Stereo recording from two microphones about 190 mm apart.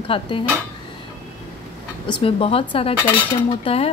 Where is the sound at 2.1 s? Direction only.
30° left (ahead or behind).